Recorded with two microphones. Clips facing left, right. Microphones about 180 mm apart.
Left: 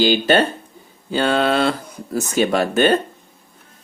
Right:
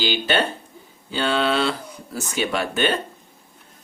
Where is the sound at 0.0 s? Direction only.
45° left (ahead or behind).